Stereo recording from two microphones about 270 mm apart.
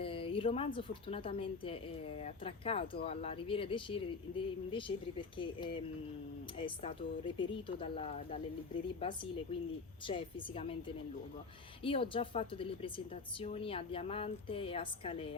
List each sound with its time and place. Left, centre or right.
0.0 s a woman's voice: centre